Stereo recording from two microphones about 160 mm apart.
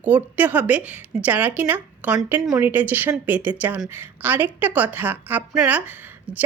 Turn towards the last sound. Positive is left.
turn(degrees=-10)  # may be behind; listen again after turning